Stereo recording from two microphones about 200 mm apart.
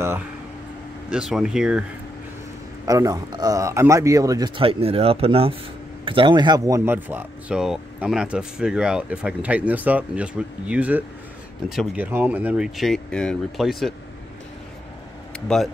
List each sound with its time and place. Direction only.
1.1 s speech: 5° right (ahead or behind)
2.8 s speech: 15° right (ahead or behind); by 13.9 s centre (ahead or behind)
15.4 s speech: centre (ahead or behind)